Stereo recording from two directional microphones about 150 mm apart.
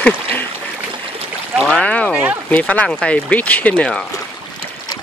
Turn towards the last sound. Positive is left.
turn(degrees=10)  # may be behind; listen again after turning